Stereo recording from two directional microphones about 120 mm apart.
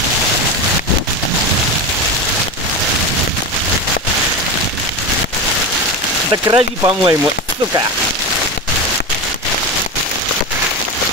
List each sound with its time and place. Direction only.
6.3 s speech: 35° right (ahead or behind)